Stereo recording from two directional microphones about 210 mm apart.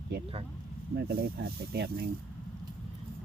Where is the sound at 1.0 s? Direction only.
45° right (ahead or behind).